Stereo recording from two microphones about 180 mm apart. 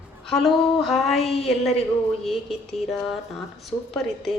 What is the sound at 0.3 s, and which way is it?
Speech, centre (ahead or behind).